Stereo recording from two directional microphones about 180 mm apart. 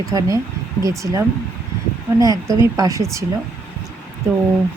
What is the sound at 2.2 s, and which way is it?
Speech, 20° right (ahead or behind).